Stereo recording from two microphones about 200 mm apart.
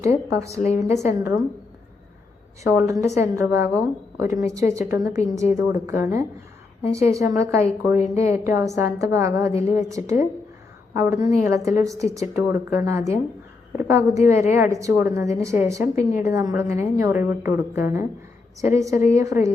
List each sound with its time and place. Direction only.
0.0 s a woman's voice: 15° right (ahead or behind)
0.5 s speech: 35° left (ahead or behind)
1.1 s a woman's voice: 15° right (ahead or behind)
2.6 s a woman's voice: 15° right (ahead or behind)
7.9 s speech: 35° left (ahead or behind)
8.3 s a woman's voice: 15° right (ahead or behind)